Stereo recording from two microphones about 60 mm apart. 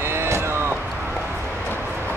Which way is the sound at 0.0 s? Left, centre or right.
Right.